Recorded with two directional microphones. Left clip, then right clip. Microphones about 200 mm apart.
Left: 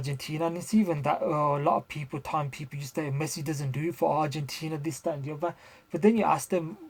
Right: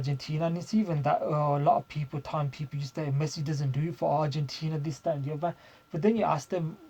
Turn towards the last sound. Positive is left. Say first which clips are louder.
# left 2 dB
turn(degrees=35)  # may be behind; listen again after turning